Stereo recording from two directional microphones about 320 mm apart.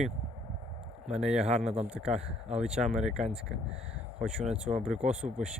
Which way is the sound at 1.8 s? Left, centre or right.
Centre.